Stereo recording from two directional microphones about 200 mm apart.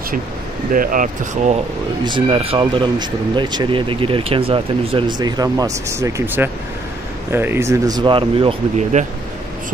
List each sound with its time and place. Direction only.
0.7 s speech: 40° right (ahead or behind)
2.0 s speech: 25° right (ahead or behind)